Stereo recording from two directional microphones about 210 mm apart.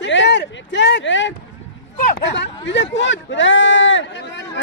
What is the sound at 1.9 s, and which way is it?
Speech, 50° left (ahead or behind).